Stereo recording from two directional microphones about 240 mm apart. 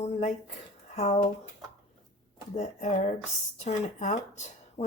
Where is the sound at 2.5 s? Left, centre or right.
Left.